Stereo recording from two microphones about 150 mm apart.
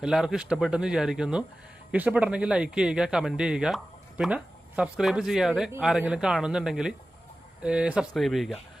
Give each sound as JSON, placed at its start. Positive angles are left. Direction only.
{"t": 0.0, "sound": "speech", "side_deg": -5}